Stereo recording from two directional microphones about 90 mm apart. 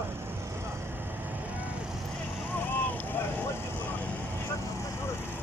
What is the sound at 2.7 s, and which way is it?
Vehicle, 20° left (ahead or behind).